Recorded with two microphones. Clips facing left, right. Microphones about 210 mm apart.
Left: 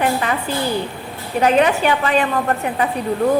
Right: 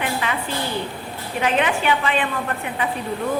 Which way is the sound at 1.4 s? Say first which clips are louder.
Left 6 dB; 40° left (ahead or behind).